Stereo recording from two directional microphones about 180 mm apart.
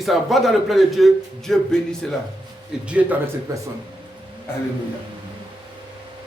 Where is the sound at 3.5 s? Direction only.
20° right (ahead or behind).